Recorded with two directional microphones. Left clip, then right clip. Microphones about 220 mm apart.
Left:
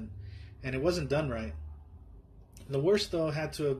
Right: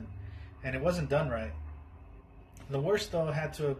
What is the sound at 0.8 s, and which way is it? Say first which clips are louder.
Speech: even; 55° left (ahead or behind).